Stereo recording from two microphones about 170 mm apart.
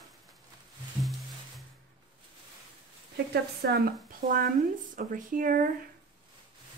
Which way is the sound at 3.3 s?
70° right (ahead or behind).